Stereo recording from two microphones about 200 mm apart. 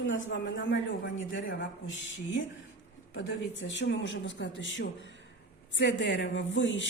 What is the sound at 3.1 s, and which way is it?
A woman's voice, 60° left (ahead or behind).